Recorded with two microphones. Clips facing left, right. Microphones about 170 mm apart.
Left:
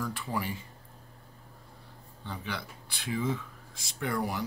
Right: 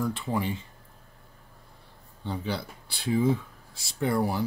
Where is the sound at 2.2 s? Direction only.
30° right (ahead or behind).